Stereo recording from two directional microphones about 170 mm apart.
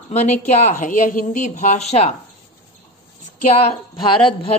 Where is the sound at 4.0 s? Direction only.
30° left (ahead or behind).